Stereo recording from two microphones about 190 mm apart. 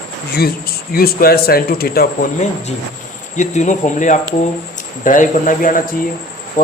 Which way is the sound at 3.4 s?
40° left (ahead or behind).